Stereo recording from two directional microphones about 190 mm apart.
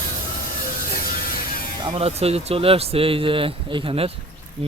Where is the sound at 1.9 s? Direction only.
30° right (ahead or behind).